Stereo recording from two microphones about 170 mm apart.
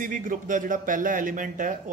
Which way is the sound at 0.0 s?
50° right (ahead or behind).